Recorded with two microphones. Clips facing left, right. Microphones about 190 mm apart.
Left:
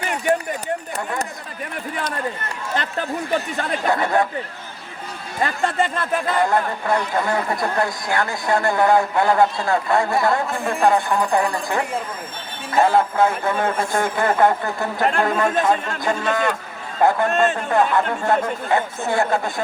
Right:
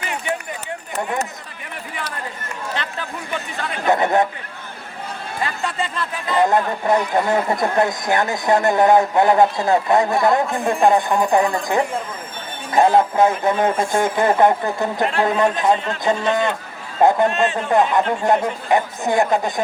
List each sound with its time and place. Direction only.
0.3 s a sound: 40° left (ahead or behind)
3.8 s speech: 20° right (ahead or behind)
5.6 s speech: 50° left (ahead or behind)
6.4 s speech: 20° right (ahead or behind)
17.3 s speech: 45° left (ahead or behind)
17.7 s speech: 20° right (ahead or behind)